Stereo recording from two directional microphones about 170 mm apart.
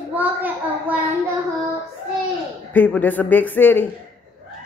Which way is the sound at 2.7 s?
10° left (ahead or behind).